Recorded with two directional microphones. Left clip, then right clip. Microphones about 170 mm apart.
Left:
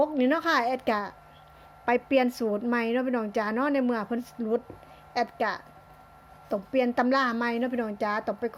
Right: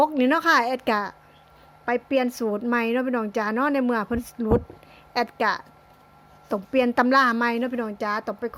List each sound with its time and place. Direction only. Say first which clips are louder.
0.0 s a woman's voice: right 5 dB; 30° right (ahead or behind)
1.8 s a woman's voice: right 1 dB; 10° right (ahead or behind)